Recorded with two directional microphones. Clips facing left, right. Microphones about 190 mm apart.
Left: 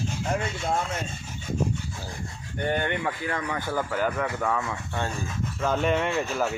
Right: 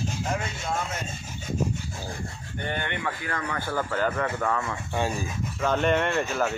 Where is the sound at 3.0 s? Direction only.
20° left (ahead or behind).